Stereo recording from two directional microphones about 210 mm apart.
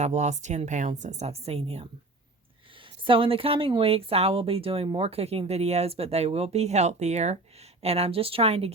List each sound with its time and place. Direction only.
0.0 s a woman's voice: 35° right (ahead or behind)
3.0 s speech: 25° right (ahead or behind)